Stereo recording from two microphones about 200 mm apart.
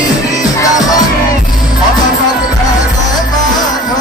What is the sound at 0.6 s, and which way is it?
Music, 20° left (ahead or behind).